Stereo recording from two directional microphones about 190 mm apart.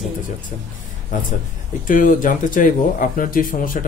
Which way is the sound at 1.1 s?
45° left (ahead or behind).